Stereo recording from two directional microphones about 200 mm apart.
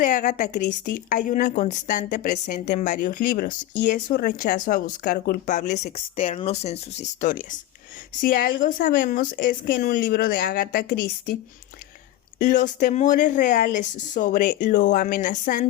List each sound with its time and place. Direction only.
0.0 s a woman's voice: 40° left (ahead or behind)
12.4 s a woman's voice: 40° left (ahead or behind)